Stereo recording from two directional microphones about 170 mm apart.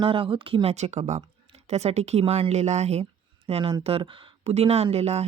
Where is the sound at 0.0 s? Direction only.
30° right (ahead or behind).